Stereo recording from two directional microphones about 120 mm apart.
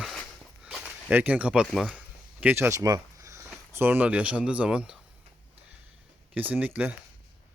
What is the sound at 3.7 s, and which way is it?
Speech, 20° right (ahead or behind).